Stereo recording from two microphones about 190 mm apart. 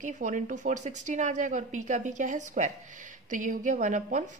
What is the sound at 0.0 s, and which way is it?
A woman's voice, 40° right (ahead or behind).